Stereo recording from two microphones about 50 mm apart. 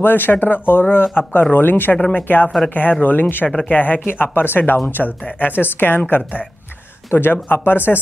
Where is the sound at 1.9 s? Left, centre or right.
Left.